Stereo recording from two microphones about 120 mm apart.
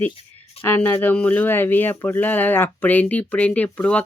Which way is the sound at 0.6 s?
15° left (ahead or behind).